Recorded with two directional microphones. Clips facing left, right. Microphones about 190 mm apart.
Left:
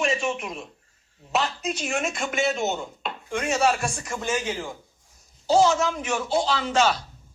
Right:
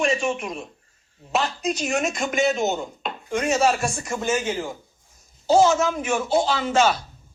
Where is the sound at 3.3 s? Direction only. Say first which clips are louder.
Right 2 dB; 5° right (ahead or behind).